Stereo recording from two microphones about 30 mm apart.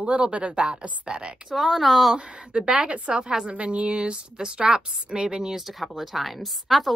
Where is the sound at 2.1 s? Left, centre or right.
Right.